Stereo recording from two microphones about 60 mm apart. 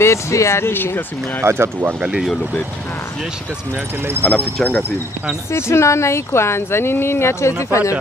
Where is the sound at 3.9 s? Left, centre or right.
Right.